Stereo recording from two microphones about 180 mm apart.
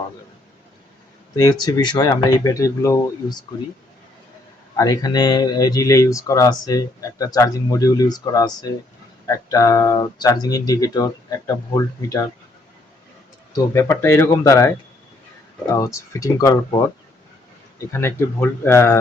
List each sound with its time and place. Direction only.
1.4 s speech: 20° left (ahead or behind)
4.8 s speech: 20° left (ahead or behind)
13.5 s speech: 15° left (ahead or behind)
15.7 s speech: 15° left (ahead or behind)
17.9 s speech: 10° left (ahead or behind)